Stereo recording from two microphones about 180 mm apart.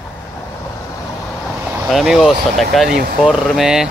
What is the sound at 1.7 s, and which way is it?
Speech, 5° right (ahead or behind).